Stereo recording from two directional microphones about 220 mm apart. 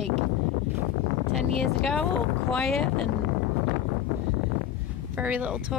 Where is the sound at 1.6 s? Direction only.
5° left (ahead or behind).